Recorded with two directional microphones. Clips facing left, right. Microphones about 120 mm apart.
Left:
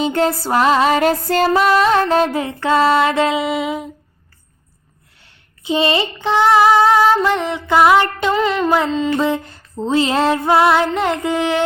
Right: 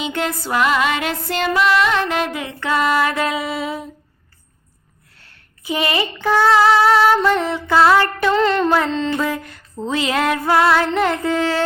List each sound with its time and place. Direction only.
0.0 s music: 35° left (ahead or behind); by 3.8 s 20° left (ahead or behind)
5.2 s a sound: 25° left (ahead or behind)
6.2 s female singing: 15° left (ahead or behind)
8.3 s music: 5° left (ahead or behind)
8.7 s female singing: 10° left (ahead or behind)
9.1 s female singing: 25° left (ahead or behind)